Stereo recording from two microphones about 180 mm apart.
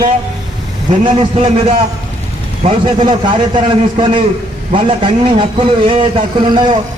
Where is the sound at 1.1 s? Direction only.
30° right (ahead or behind).